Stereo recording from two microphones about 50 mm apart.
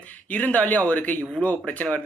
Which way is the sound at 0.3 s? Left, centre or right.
Left.